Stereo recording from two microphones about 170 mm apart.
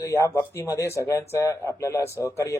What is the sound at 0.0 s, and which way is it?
Speech, 15° left (ahead or behind).